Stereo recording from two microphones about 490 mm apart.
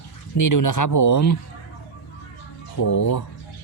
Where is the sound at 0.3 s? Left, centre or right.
Left.